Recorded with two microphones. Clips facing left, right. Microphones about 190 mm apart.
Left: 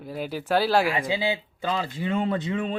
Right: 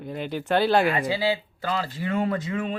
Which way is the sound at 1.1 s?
20° left (ahead or behind).